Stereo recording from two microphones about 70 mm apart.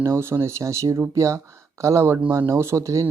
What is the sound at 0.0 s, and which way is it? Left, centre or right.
Speech, right.